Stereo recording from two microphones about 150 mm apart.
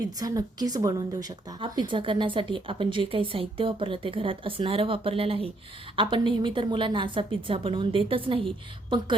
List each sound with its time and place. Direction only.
0.0 s speech: 25° right (ahead or behind)